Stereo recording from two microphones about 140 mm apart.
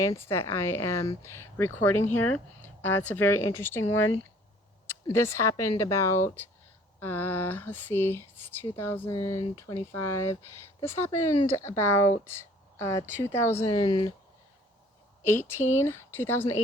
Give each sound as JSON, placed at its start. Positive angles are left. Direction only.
{"t": 0.0, "sound": "speech", "side_deg": 20}
{"t": 13.7, "sound": "speech", "side_deg": 30}
{"t": 15.2, "sound": "a woman's voice", "side_deg": 15}